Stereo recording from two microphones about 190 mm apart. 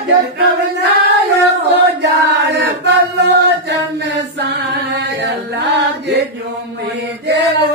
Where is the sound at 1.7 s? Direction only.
65° right (ahead or behind).